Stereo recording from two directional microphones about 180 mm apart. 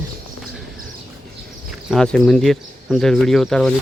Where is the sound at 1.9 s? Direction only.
5° left (ahead or behind).